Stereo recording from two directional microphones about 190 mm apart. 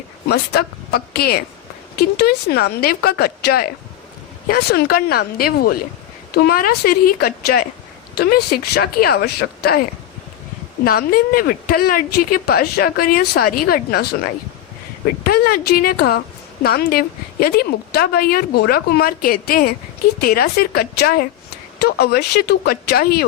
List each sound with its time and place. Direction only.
0.3 s a woman's voice: 55° left (ahead or behind)
10.8 s a woman's voice: 50° left (ahead or behind)